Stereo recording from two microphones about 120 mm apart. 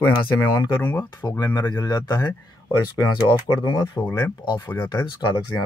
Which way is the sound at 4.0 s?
20° left (ahead or behind).